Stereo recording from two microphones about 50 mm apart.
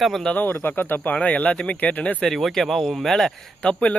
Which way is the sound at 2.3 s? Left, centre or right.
Centre.